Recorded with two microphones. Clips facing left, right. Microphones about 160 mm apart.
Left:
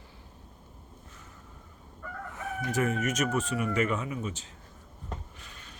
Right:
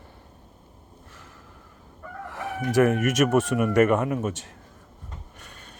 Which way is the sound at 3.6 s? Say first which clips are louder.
Right 10 dB; 50° right (ahead or behind).